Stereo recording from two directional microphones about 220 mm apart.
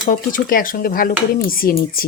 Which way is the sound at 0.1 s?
40° left (ahead or behind).